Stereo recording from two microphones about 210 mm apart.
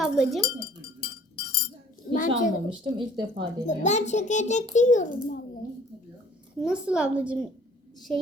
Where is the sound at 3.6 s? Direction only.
35° left (ahead or behind).